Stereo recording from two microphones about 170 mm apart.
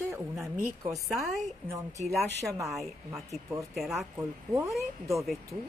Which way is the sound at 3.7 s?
Centre (ahead or behind).